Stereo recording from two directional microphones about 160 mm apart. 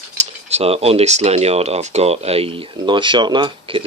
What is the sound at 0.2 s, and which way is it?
Speech, 40° right (ahead or behind).